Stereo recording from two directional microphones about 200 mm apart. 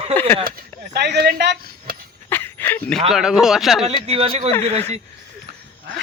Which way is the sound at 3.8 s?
30° right (ahead or behind).